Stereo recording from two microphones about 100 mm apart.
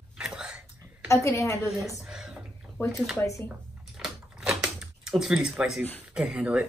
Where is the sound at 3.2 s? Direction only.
30° left (ahead or behind).